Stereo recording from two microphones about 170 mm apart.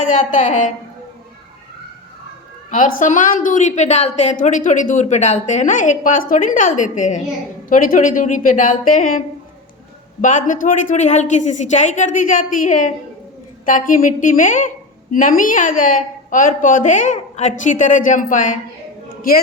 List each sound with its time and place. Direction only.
0.0 s a woman's voice: 45° left (ahead or behind)
2.6 s a woman's voice: 50° left (ahead or behind)